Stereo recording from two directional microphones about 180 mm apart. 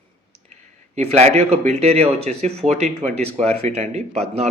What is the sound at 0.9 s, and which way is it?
A man's voice, 35° right (ahead or behind).